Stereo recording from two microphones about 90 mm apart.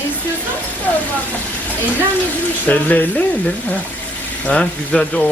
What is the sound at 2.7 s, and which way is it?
Speech, 20° left (ahead or behind).